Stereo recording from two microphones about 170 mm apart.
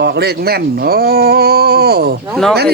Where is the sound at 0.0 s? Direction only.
75° right (ahead or behind).